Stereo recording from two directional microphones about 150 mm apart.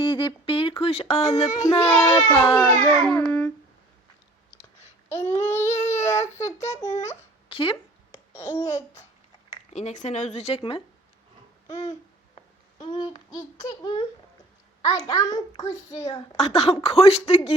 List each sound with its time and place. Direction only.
0.0 s speech: 30° left (ahead or behind)
1.5 s a child's voice: 25° left (ahead or behind)
2.6 s speech: 10° left (ahead or behind)
5.0 s speech: 15° left (ahead or behind)
5.8 s child singing: 20° left (ahead or behind)
6.7 s a child's voice: 20° left (ahead or behind)
7.5 s speech: 35° left (ahead or behind)
8.1 s a child's voice: 20° left (ahead or behind)
9.7 s a woman's voice: 50° left (ahead or behind)
11.7 s a child's voice: 20° left (ahead or behind)
13.7 s a child's voice: 30° left (ahead or behind)
16.4 s speech: 40° left (ahead or behind)